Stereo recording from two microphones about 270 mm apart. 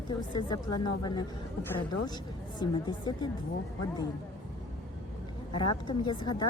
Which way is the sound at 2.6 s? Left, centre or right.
Centre.